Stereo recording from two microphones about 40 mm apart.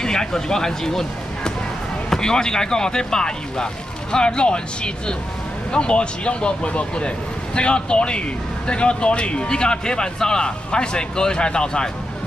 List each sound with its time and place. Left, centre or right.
0.0 s speech: centre